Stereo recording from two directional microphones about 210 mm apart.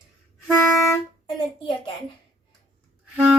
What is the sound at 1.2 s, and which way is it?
Speech, 25° left (ahead or behind).